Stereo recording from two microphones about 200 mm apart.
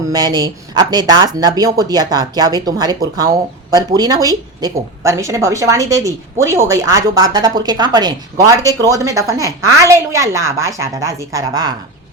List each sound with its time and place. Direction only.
0.1 s a woman's voice: 20° right (ahead or behind)